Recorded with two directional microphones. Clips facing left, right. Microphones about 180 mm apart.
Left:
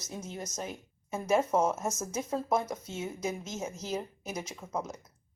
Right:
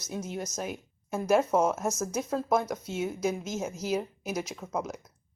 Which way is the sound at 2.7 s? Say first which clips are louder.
Right 4 dB; 80° right.